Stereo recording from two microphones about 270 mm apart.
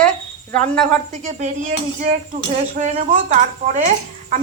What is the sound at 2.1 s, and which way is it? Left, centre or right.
A woman's voice, right.